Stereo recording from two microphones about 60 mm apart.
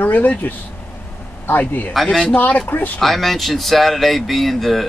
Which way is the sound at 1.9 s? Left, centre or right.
Centre.